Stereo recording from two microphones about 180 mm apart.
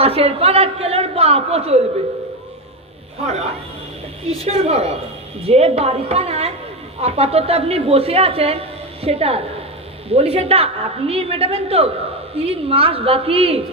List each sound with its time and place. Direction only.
0.0 s speech: 35° right (ahead or behind)
3.2 s speech: 35° right (ahead or behind)